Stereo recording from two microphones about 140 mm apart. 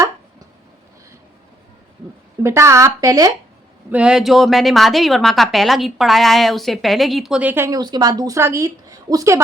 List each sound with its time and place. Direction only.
2.4 s a woman's voice: 20° right (ahead or behind)
3.9 s a woman's voice: 5° right (ahead or behind)
7.7 s a woman's voice: 30° right (ahead or behind)